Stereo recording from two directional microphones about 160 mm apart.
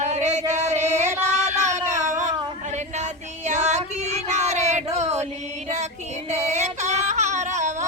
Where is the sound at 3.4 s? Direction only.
45° right (ahead or behind).